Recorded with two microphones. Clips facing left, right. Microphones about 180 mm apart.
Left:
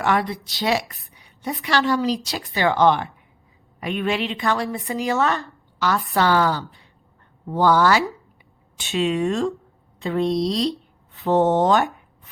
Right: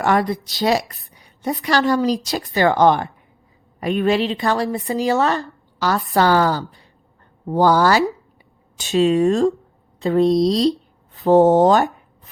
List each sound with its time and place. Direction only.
0.0 s a woman's voice: 45° right (ahead or behind)